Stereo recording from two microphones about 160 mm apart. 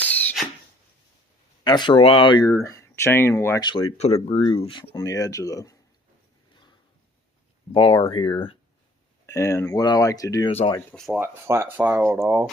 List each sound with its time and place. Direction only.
0.0 s a sound: 10° left (ahead or behind)
1.6 s speech: 30° left (ahead or behind)
2.5 s speech: 15° left (ahead or behind)
3.7 s speech: 35° left (ahead or behind)
4.9 s speech: 20° left (ahead or behind)
7.7 s speech: 35° left (ahead or behind)
9.2 s speech: 15° left (ahead or behind)
10.9 s speech: centre (ahead or behind)
11.2 s speech: 15° right (ahead or behind)